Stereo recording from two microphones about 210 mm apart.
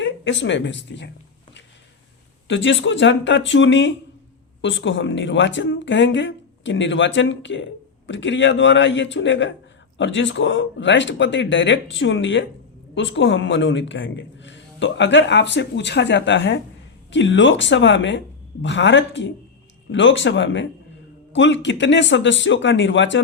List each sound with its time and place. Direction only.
0.0 s speech: 60° left (ahead or behind)
2.5 s speech: 60° left (ahead or behind)